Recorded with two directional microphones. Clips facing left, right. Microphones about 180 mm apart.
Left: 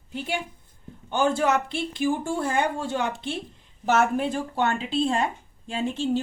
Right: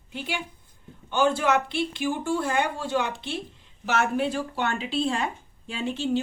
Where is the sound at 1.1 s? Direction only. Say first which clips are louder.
Even; 40° left (ahead or behind).